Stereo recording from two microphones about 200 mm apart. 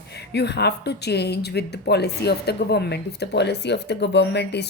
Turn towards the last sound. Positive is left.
turn(degrees=60)  # may be behind; listen again after turning